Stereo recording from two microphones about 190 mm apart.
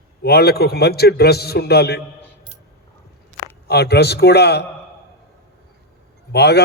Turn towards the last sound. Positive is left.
turn(degrees=60)  # may be behind; listen again after turning